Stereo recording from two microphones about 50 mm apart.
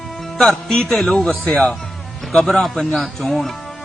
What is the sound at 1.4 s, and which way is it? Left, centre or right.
Speech, left.